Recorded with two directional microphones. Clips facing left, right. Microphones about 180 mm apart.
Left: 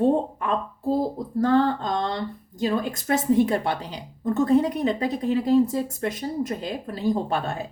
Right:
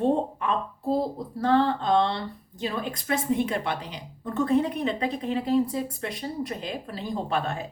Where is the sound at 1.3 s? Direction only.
40° left (ahead or behind).